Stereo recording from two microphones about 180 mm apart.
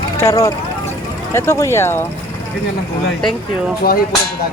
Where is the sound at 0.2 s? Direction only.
15° left (ahead or behind).